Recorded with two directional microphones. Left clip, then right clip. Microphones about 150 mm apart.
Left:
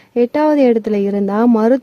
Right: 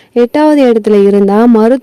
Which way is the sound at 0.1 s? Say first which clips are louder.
Right 6 dB; 35° right (ahead or behind).